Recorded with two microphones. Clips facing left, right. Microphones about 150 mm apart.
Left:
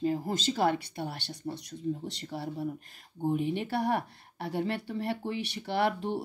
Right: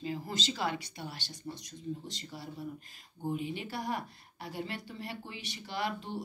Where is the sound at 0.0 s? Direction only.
50° left (ahead or behind).